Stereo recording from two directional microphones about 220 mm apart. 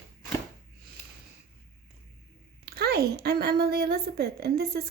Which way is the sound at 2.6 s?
45° right (ahead or behind).